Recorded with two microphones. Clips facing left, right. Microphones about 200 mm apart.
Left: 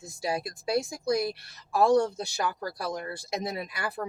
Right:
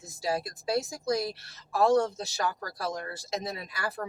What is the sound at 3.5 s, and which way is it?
Speech, 20° left (ahead or behind).